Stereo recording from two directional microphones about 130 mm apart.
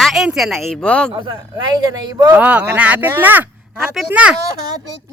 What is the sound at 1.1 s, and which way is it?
Speech, 40° right (ahead or behind).